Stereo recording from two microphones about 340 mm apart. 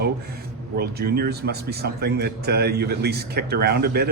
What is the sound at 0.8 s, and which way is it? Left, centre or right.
Speech, right.